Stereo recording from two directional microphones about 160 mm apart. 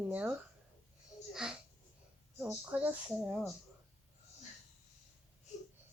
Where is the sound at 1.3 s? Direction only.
5° right (ahead or behind).